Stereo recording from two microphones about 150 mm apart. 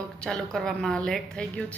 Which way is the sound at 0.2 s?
5° left (ahead or behind).